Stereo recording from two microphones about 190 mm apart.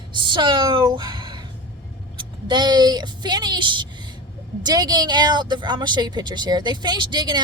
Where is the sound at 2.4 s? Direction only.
25° right (ahead or behind).